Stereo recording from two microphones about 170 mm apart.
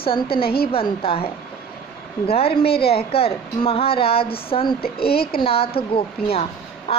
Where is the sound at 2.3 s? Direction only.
35° left (ahead or behind).